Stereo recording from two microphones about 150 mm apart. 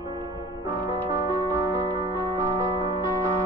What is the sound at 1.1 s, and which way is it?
Music, 20° right (ahead or behind).